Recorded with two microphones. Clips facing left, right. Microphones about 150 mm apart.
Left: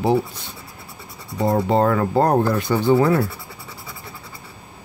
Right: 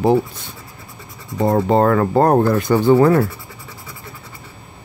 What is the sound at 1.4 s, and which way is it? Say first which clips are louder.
Speech: right 3 dB; 55° right (ahead or behind).